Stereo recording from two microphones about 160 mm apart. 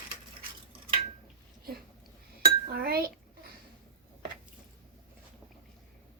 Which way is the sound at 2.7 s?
65° right (ahead or behind).